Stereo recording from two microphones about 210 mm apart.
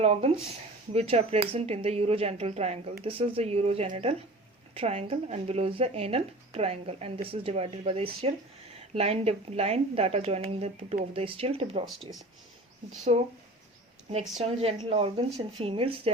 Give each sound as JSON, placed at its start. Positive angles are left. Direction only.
{"t": 0.0, "sound": "speech", "side_deg": -30}
{"t": 14.4, "sound": "speech", "side_deg": -30}